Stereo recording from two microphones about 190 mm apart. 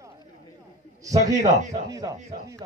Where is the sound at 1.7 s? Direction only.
20° right (ahead or behind).